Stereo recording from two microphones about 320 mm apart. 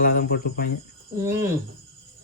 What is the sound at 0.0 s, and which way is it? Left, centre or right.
Speech, left.